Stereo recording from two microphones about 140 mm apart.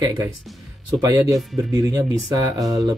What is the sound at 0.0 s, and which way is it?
Speech, 20° right (ahead or behind).